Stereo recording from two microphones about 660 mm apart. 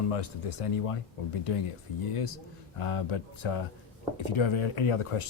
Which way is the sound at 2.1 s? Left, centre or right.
Left.